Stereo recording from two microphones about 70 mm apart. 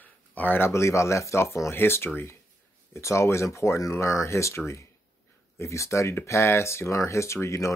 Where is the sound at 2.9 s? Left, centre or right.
Left.